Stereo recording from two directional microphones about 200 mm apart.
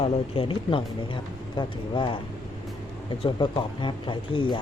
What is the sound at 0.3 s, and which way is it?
Speech, 25° left (ahead or behind).